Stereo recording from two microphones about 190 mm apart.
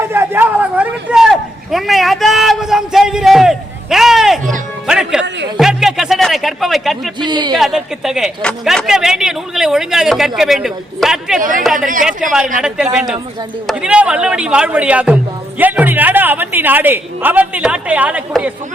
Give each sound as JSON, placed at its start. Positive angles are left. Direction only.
{"t": 0.0, "sound": "a sound", "side_deg": -10}
{"t": 4.9, "sound": "music", "side_deg": -5}
{"t": 5.5, "sound": "speech", "side_deg": 0}
{"t": 7.2, "sound": "a man's voice", "side_deg": -25}
{"t": 7.5, "sound": "speech", "side_deg": 0}
{"t": 11.3, "sound": "speech", "side_deg": -45}
{"t": 11.6, "sound": "speech", "side_deg": 0}